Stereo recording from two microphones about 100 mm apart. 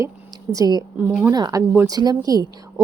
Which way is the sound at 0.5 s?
40° right (ahead or behind).